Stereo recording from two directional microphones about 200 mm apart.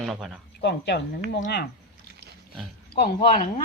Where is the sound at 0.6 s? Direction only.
60° left (ahead or behind).